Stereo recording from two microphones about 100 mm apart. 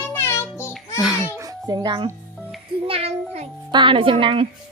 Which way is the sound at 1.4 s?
35° right (ahead or behind).